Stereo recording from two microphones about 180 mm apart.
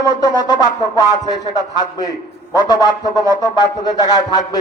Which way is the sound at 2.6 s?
20° left (ahead or behind).